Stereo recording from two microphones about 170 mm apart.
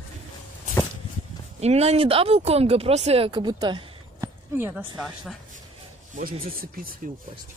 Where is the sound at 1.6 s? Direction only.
40° right (ahead or behind).